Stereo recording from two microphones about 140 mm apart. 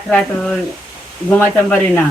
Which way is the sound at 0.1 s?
5° left (ahead or behind).